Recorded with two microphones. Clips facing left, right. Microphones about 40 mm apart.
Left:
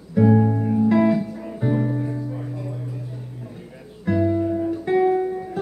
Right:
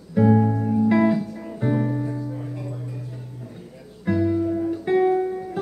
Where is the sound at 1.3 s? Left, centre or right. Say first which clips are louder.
Left 1 dB; centre.